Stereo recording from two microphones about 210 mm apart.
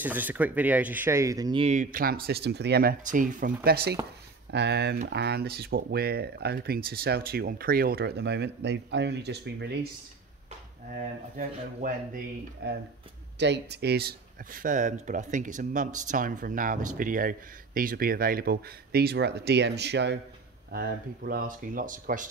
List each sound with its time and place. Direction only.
0.0 s speech: 10° right (ahead or behind); by 9.8 s 55° right (ahead or behind)
10.9 s speech: 40° right (ahead or behind)
12.6 s speech: 50° right (ahead or behind)